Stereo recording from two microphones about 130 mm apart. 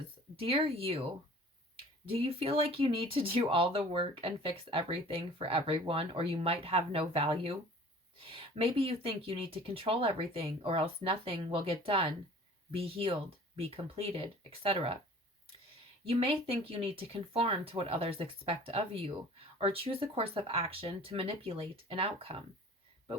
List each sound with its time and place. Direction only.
0.4 s speech: 45° right (ahead or behind)
2.0 s speech: 45° right (ahead or behind)
16.0 s speech: 45° right (ahead or behind)